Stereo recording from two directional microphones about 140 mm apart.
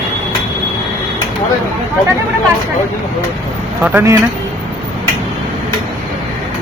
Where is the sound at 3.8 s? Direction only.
15° right (ahead or behind).